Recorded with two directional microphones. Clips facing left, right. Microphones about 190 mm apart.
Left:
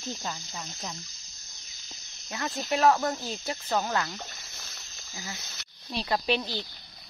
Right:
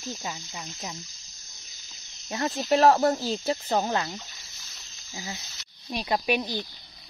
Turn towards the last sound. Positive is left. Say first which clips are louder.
# right 2 dB
turn(degrees=-15)  # may be behind; listen again after turning